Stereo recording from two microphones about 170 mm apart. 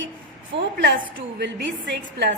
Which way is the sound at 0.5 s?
90° right.